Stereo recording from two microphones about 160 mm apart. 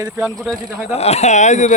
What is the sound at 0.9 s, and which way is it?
Speech, 40° left (ahead or behind).